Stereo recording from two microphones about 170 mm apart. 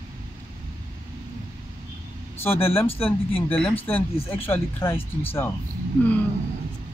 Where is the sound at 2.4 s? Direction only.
15° left (ahead or behind).